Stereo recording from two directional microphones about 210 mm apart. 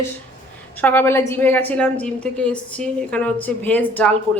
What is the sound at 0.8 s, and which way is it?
A woman's voice, 10° left (ahead or behind).